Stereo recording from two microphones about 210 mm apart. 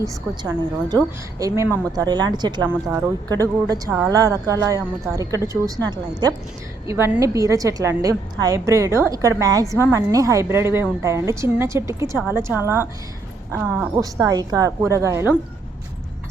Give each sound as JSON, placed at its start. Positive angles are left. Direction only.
{"t": 0.0, "sound": "a woman's voice", "side_deg": -15}